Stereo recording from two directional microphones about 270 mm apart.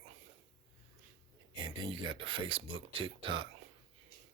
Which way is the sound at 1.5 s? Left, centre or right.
Centre.